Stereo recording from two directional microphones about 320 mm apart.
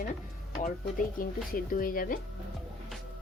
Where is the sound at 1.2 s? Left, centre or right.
Left.